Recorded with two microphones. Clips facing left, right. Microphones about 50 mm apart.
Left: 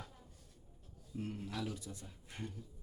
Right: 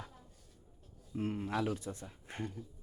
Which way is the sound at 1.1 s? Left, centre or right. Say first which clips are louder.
Right 7 dB; right.